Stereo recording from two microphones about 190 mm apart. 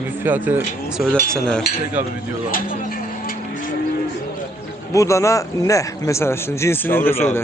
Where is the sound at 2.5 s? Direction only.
50° left (ahead or behind).